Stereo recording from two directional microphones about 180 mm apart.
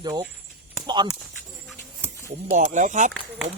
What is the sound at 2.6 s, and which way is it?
Speech, 45° right (ahead or behind).